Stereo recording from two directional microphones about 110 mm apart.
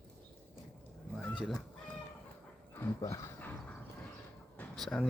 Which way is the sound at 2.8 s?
25° left (ahead or behind).